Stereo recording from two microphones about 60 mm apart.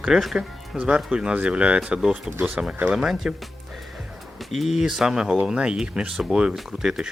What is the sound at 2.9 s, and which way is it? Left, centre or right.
Speech, centre.